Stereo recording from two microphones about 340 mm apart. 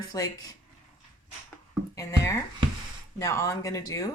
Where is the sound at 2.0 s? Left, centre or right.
Centre.